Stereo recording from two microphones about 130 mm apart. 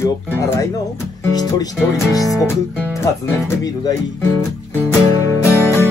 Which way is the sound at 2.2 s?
20° left (ahead or behind).